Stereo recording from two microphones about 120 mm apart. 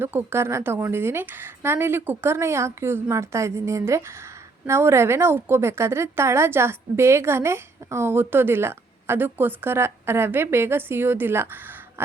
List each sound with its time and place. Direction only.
0.0 s a woman's voice: 20° right (ahead or behind)